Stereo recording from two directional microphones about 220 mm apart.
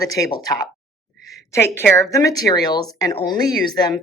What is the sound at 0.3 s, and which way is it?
Speech, 15° left (ahead or behind).